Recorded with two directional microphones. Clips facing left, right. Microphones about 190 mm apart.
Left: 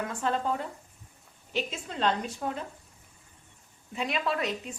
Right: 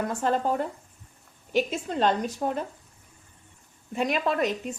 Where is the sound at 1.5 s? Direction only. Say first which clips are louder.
Right 7 dB; 45° right (ahead or behind).